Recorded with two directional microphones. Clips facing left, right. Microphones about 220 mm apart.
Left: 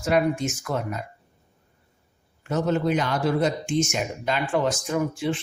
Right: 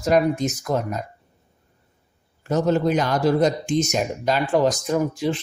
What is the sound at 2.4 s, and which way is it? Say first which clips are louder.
Speech: right 3 dB; 40° right (ahead or behind).